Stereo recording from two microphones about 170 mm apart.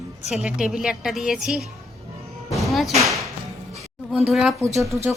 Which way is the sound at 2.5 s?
Centre (ahead or behind).